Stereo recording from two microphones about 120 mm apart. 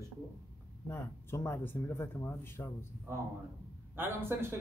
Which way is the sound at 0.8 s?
20° left (ahead or behind).